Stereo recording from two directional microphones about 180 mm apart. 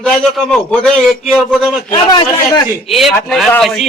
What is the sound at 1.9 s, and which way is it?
Speech, 25° left (ahead or behind).